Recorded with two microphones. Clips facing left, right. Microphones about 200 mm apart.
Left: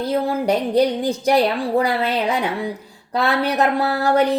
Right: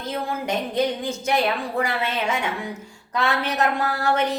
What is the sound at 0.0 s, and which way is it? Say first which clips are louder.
A woman's voice: left 8 dB; 35° left (ahead or behind).